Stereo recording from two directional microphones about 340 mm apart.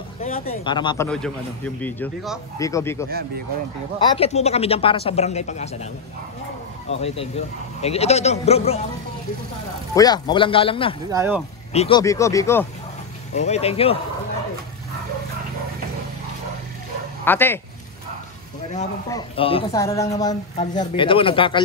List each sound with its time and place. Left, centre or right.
0.2 s a man's voice: centre
4.2 s speech: centre
7.8 s speech: centre
9.9 s speech: centre
11.1 s speech: centre
11.7 s speech: centre
13.3 s speech: centre
17.2 s speech: centre
19.0 s speech: centre